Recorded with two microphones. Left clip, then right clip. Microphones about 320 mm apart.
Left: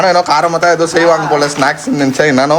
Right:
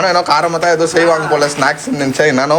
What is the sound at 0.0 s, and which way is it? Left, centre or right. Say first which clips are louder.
A man's voice: left 2 dB; centre.